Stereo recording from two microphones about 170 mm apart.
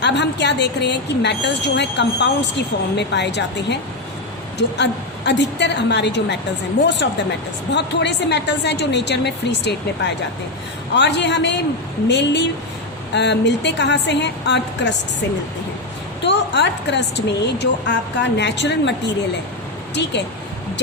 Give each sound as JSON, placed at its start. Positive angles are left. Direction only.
{"t": 0.0, "sound": "speech", "side_deg": 90}
{"t": 16.2, "sound": "speech", "side_deg": 90}